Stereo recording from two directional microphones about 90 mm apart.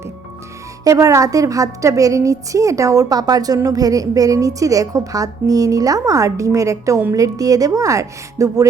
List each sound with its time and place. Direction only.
0.9 s a woman's voice: 35° right (ahead or behind)